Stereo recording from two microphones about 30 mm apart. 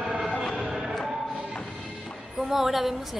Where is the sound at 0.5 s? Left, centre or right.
Centre.